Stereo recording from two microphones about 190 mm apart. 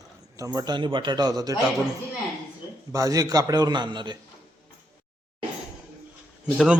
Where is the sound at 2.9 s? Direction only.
20° right (ahead or behind).